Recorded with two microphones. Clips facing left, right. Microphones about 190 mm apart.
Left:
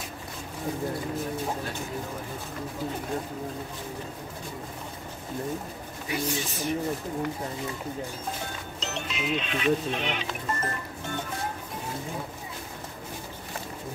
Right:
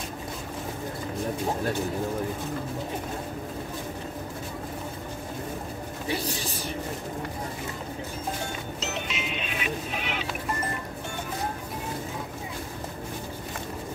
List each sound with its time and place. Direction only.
6.0 s a man's voice: 35° right (ahead or behind)
8.7 s speech: 5° right (ahead or behind)